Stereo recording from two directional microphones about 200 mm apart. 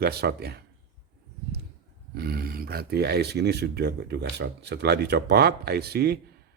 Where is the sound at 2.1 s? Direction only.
50° right (ahead or behind).